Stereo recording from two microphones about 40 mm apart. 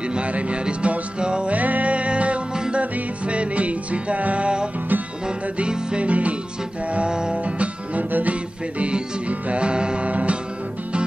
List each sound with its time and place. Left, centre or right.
0.1 s music: right
1.5 s music: right
2.5 s music: centre
2.8 s music: right
6.0 s music: right
7.1 s music: right
7.3 s music: right
10.0 s music: right